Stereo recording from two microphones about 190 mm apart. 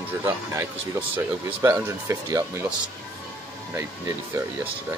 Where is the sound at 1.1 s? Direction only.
10° right (ahead or behind).